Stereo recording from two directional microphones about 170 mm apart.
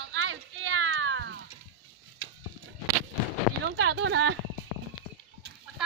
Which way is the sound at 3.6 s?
90° right.